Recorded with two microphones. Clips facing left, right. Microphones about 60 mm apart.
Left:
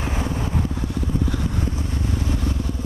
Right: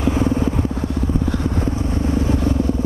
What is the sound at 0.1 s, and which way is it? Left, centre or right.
Vehicle, right.